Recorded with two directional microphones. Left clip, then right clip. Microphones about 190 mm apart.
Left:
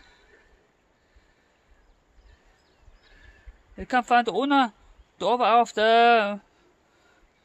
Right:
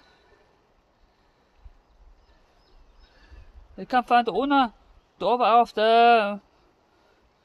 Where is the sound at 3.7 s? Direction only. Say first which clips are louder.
Right 1 dB; 10° left (ahead or behind).